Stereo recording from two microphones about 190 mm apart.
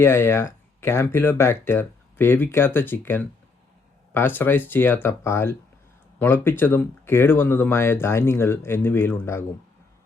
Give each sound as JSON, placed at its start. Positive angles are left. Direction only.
{"t": 0.0, "sound": "speech", "side_deg": 10}